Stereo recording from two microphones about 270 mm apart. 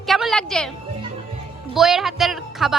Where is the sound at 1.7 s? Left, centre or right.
Centre.